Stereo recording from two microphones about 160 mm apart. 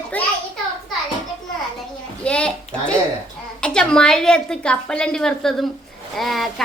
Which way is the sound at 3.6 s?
5° left (ahead or behind).